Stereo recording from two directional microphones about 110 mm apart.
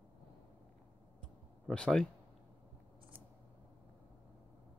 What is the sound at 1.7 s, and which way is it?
Speech, 5° left (ahead or behind).